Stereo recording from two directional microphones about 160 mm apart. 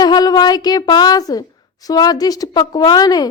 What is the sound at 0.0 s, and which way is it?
A woman's voice, 25° left (ahead or behind).